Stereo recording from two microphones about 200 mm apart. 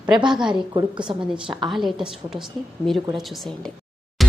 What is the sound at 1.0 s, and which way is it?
Speech, 25° right (ahead or behind).